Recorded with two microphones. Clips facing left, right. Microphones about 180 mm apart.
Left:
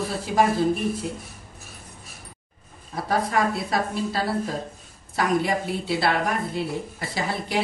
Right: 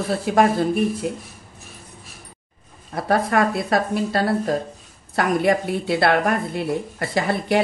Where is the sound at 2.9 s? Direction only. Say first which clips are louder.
Right 4 dB; 60° right (ahead or behind).